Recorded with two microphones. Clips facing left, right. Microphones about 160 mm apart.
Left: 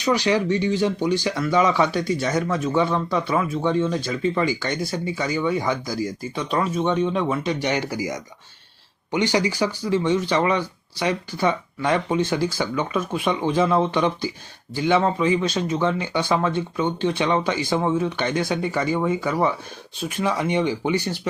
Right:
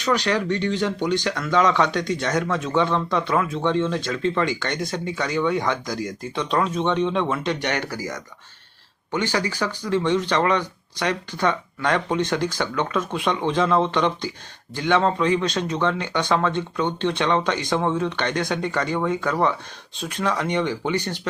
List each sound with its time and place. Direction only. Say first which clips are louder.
0.0 s speech: left 2 dB; 10° left (ahead or behind)